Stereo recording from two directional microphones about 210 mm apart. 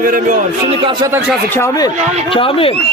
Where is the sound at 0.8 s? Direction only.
15° right (ahead or behind).